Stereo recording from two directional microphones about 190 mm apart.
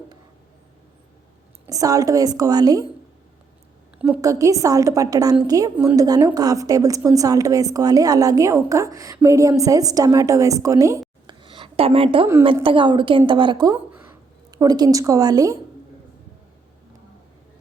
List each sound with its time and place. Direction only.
1.6 s a woman's voice: 20° right (ahead or behind)
4.0 s a woman's voice: 15° right (ahead or behind)
11.3 s a sound: 25° right (ahead or behind)
12.3 s a woman's voice: 20° right (ahead or behind)